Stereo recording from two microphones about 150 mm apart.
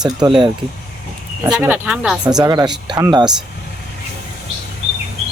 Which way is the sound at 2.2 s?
25° right (ahead or behind).